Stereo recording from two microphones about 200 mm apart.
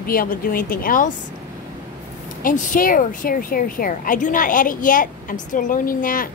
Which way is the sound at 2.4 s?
40° left (ahead or behind).